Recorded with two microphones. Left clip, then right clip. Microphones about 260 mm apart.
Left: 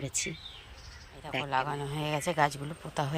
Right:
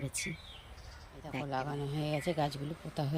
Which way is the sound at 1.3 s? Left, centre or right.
Centre.